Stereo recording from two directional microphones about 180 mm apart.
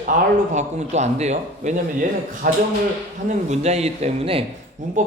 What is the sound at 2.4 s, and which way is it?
Speech, 55° right (ahead or behind).